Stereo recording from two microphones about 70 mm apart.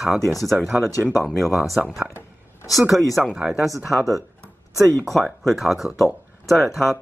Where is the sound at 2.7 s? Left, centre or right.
Centre.